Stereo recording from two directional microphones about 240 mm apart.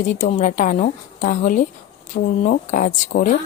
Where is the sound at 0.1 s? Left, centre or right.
Left.